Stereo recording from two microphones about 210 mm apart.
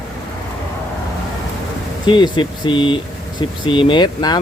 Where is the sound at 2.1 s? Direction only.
20° left (ahead or behind).